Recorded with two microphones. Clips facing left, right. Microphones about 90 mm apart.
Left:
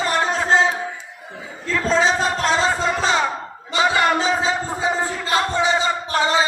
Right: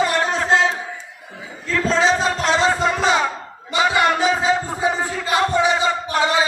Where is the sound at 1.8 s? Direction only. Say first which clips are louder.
Right 1 dB; centre (ahead or behind).